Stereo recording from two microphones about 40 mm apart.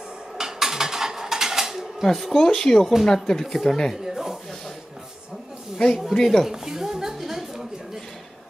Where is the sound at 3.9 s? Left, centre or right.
Centre.